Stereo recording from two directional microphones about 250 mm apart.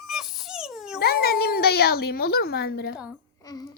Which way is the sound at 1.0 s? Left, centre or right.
Left.